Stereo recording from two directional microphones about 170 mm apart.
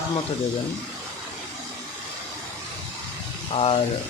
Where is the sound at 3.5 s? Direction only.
35° left (ahead or behind).